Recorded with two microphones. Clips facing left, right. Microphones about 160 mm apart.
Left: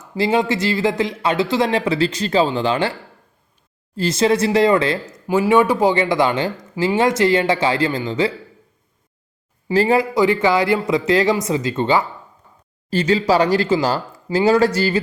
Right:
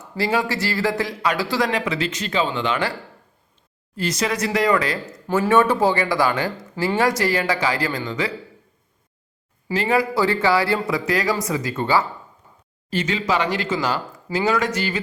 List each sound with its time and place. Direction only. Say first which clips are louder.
0.0 s speech: left 4 dB; 20° left (ahead or behind)
3.9 s speech: left 7 dB; 30° left (ahead or behind)
5.3 s speech: left 2 dB; 15° left (ahead or behind)
9.7 s speech: left 4 dB; 30° left (ahead or behind)
10.2 s speech: left 3 dB; 20° left (ahead or behind)
12.9 s speech: left 6 dB; 35° left (ahead or behind)